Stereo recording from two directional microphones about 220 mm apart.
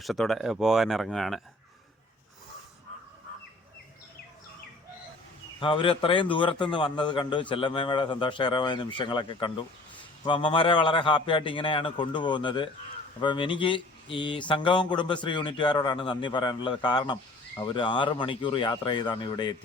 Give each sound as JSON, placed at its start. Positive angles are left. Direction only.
{"t": 0.0, "sound": "speech", "side_deg": 0}
{"t": 5.5, "sound": "a man's voice", "side_deg": 20}